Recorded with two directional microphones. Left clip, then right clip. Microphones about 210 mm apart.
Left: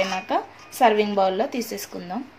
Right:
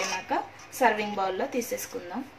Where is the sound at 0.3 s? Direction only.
45° left (ahead or behind).